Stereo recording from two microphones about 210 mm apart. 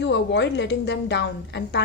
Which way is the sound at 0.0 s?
55° left (ahead or behind).